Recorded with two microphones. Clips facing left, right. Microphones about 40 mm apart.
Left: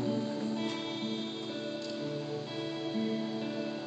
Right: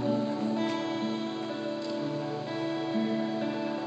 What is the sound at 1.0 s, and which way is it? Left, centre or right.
Music, right.